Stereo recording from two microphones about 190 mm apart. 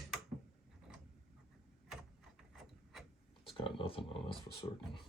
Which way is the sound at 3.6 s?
30° left (ahead or behind).